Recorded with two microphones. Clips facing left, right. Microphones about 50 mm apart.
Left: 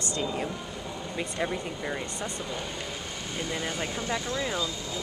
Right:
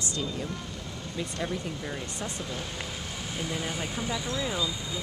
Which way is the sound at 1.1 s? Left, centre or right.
Centre.